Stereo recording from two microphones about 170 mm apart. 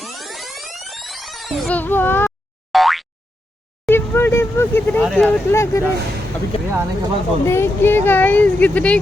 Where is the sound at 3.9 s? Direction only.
15° left (ahead or behind).